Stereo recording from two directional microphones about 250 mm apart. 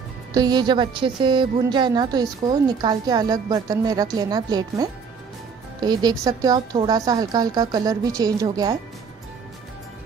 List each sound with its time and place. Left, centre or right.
0.3 s a woman's voice: centre